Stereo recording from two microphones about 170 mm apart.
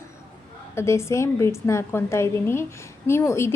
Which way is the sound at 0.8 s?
15° left (ahead or behind).